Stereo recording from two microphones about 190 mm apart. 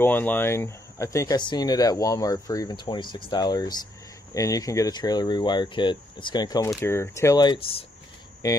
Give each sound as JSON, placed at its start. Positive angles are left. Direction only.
{"t": 0.0, "sound": "speech", "side_deg": 10}